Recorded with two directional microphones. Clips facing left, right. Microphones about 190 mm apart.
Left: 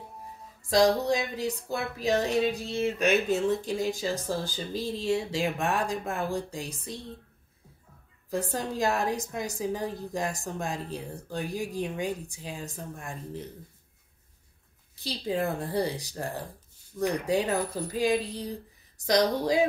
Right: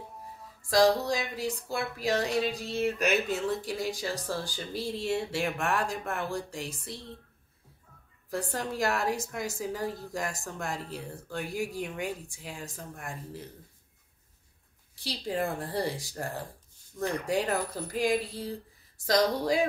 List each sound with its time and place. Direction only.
0.7 s a woman's voice: 20° left (ahead or behind)
8.3 s a woman's voice: 20° left (ahead or behind)
15.0 s a woman's voice: 20° left (ahead or behind)